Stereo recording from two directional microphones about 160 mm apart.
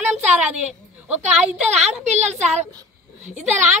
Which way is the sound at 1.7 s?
45° right (ahead or behind).